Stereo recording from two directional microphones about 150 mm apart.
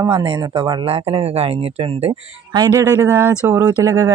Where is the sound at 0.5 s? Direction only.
30° right (ahead or behind).